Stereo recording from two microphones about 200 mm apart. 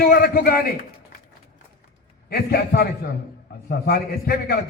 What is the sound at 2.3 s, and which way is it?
A man's voice, 50° left (ahead or behind).